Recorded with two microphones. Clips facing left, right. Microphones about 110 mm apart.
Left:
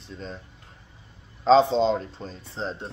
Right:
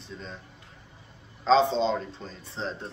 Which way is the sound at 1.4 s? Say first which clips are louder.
Left 4 dB; 40° left (ahead or behind).